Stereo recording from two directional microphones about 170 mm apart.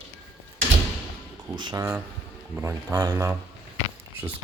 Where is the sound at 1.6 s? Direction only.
25° right (ahead or behind).